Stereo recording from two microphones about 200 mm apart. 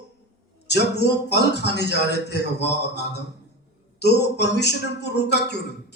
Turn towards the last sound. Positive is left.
turn(degrees=60)  # may be behind; listen again after turning